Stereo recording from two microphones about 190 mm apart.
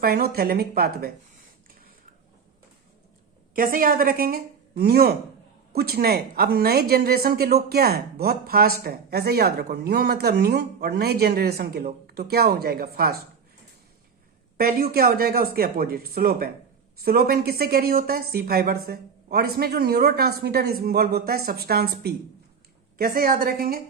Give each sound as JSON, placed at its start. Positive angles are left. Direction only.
{"t": 0.0, "sound": "a woman's voice", "side_deg": -55}
{"t": 3.5, "sound": "a woman's voice", "side_deg": -45}
{"t": 14.6, "sound": "a woman's voice", "side_deg": -50}